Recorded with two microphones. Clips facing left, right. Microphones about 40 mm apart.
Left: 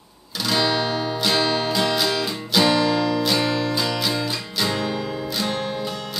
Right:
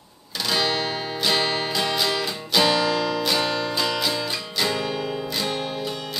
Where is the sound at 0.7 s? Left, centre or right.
Centre.